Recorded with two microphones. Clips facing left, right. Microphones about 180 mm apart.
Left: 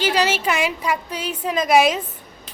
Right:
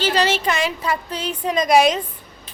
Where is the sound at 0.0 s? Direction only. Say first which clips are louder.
Right 1 dB; 10° left (ahead or behind).